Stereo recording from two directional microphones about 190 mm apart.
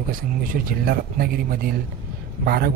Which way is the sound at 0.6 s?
50° right (ahead or behind).